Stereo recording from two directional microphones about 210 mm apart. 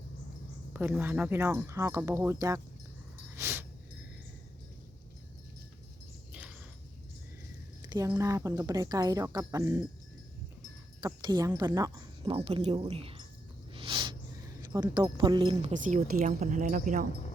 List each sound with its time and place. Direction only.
0.7 s speech: 10° right (ahead or behind)
3.3 s a sound: 10° right (ahead or behind)
7.9 s speech: 15° right (ahead or behind)
11.0 s a woman's voice: 20° right (ahead or behind)
13.7 s a sound: 25° right (ahead or behind)
14.7 s speech: 20° right (ahead or behind); by 17.1 s 40° right (ahead or behind)